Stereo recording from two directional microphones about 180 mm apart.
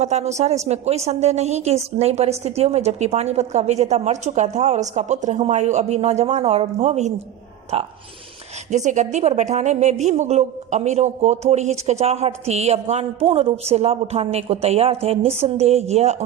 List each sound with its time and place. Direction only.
0.0 s a woman's voice: 40° right (ahead or behind)